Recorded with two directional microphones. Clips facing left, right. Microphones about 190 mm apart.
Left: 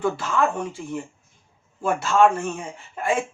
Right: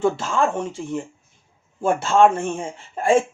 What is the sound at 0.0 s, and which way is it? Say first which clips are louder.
Speech: right 3 dB; 25° right (ahead or behind).